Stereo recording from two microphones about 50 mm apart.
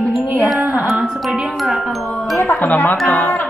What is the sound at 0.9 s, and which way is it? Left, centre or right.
Speech, centre.